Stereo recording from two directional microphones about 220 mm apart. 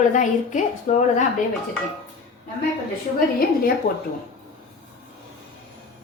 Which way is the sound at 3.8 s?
40° left (ahead or behind).